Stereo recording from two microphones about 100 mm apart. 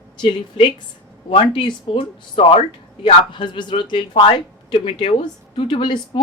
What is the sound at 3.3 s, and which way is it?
Speech, 55° left (ahead or behind).